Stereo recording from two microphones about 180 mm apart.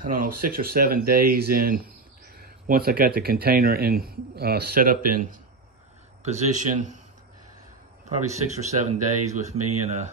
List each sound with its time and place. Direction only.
0.0 s a man's voice: 50° right (ahead or behind)
8.3 s a man's voice: 40° right (ahead or behind)